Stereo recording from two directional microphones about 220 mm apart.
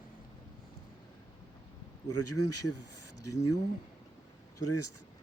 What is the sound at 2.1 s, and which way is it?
Speech, 90° left.